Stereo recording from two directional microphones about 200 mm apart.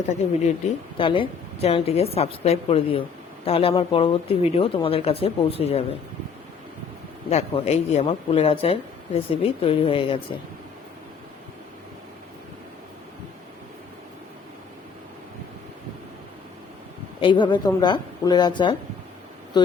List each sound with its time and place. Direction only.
0.4 s speech: 30° left (ahead or behind)
7.3 s speech: 30° left (ahead or behind)
17.2 s speech: 25° left (ahead or behind)